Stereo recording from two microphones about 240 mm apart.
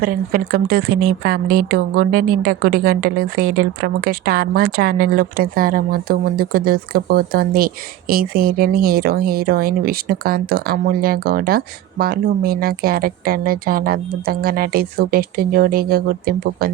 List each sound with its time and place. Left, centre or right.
0.0 s a woman's voice: right